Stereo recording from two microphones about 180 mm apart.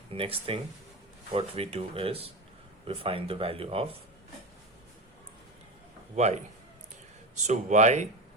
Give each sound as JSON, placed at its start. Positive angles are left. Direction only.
{"t": 0.1, "sound": "speech", "side_deg": -30}
{"t": 6.1, "sound": "speech", "side_deg": -40}
{"t": 7.4, "sound": "speech", "side_deg": -40}